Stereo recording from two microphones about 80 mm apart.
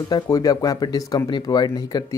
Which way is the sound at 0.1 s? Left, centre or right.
Left.